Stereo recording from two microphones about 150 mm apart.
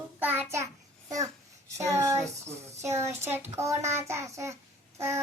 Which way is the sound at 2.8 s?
15° right (ahead or behind).